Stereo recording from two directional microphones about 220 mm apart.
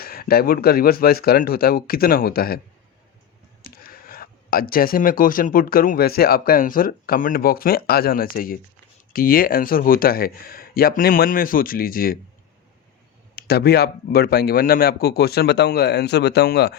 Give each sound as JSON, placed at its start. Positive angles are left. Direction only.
{"t": 0.0, "sound": "a man's voice", "side_deg": 45}
{"t": 3.6, "sound": "speech", "side_deg": 40}
{"t": 13.3, "sound": "a man's voice", "side_deg": 45}